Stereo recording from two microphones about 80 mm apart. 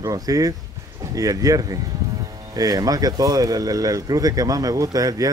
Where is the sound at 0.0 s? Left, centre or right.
Right.